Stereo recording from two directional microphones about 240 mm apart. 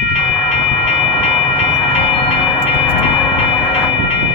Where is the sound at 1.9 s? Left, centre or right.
Left.